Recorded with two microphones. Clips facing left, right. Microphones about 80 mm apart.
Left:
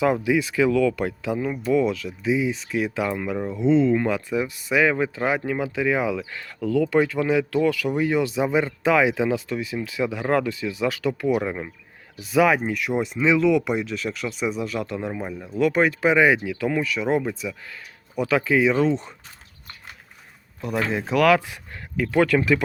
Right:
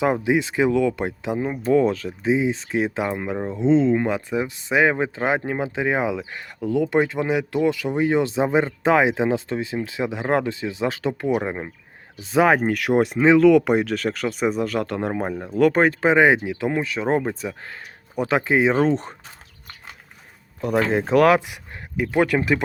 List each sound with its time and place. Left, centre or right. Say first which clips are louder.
0.0 s speech: right 1 dB; right
12.5 s speech: right 5 dB; right
18.8 s speech: right 2 dB; right
20.6 s speech: right 5 dB; right
21.3 s speech: right 1 dB; centre